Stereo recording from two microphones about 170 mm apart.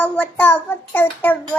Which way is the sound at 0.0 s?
10° left (ahead or behind).